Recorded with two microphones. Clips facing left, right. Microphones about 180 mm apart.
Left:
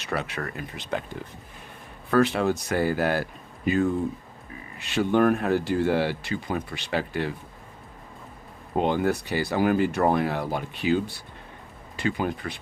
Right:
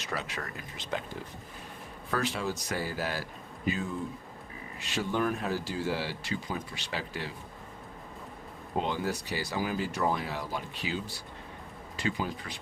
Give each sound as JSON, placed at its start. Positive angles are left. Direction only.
{"t": 0.0, "sound": "speech", "side_deg": 60}
{"t": 2.0, "sound": "speech", "side_deg": 60}
{"t": 8.8, "sound": "speech", "side_deg": 60}